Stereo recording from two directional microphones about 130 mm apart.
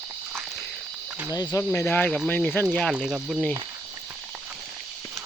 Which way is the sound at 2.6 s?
5° right (ahead or behind).